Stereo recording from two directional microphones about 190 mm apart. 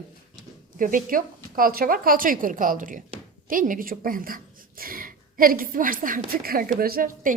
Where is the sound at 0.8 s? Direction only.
45° right (ahead or behind).